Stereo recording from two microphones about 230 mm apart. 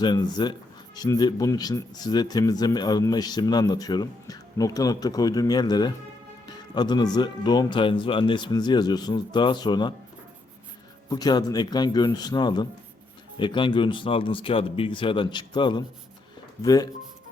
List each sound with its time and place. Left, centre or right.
0.0 s speech: centre
11.1 s speech: centre